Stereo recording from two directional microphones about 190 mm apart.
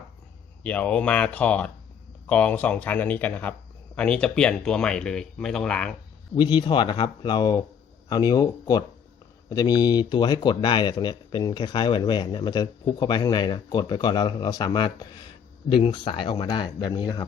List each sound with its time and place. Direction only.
0.6 s speech: 5° left (ahead or behind)
6.3 s speech: 25° left (ahead or behind)